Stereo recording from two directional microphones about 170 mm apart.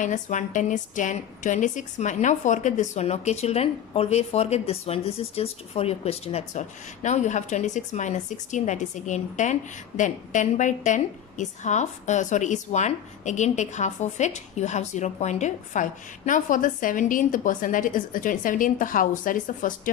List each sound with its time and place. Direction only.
0.0 s a woman's voice: 45° left (ahead or behind)